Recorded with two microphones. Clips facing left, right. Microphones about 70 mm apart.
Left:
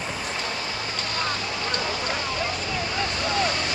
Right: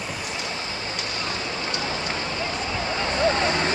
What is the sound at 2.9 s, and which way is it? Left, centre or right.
Vehicle, right.